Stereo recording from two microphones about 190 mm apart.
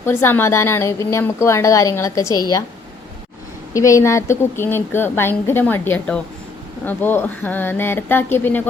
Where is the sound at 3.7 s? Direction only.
15° left (ahead or behind).